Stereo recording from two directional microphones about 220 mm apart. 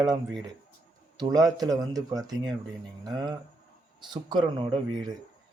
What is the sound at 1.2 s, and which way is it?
Speech, 15° right (ahead or behind).